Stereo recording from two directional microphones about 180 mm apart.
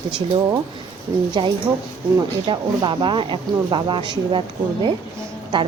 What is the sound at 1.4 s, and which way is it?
A woman's voice, 25° right (ahead or behind).